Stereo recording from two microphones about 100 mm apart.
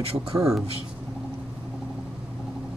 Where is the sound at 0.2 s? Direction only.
50° right (ahead or behind).